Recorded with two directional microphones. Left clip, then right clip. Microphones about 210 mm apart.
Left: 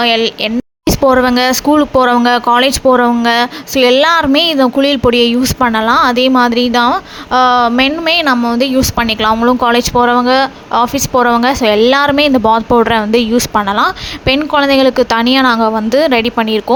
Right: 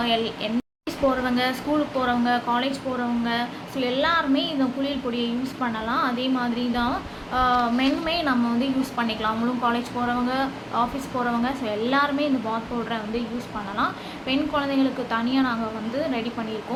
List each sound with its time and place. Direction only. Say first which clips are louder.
0.0 s speech: left 13 dB; 45° left (ahead or behind)